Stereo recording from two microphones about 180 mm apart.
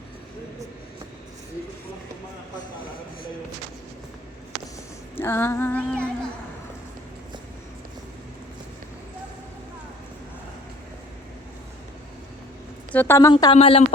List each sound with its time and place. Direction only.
5.1 s female singing: 15° left (ahead or behind)
12.9 s a woman's voice: 10° left (ahead or behind)
13.3 s speech: 30° left (ahead or behind)